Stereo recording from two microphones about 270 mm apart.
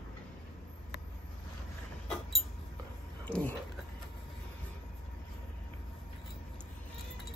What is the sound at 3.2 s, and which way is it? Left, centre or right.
Speech, centre.